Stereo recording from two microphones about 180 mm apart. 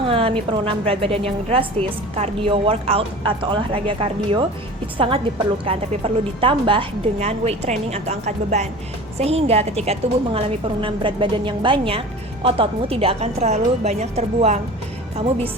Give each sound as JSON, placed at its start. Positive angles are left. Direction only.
{"t": 0.1, "sound": "a woman's voice", "side_deg": -30}